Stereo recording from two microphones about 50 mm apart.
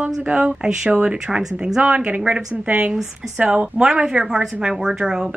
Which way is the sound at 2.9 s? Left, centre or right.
Centre.